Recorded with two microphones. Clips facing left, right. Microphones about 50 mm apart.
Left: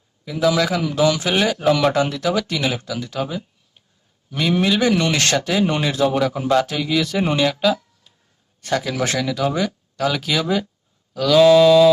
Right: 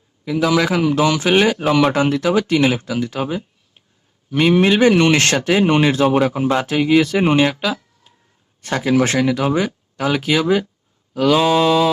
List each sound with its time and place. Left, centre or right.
0.3 s speech: right
7.5 s speech: centre
8.6 s speech: right
11.1 s mantra: right
11.4 s speech: right